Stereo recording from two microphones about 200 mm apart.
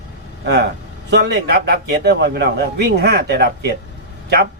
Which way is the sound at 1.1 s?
60° right (ahead or behind).